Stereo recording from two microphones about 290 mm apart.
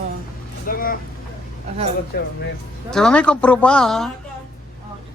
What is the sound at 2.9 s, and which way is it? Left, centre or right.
Speech, centre.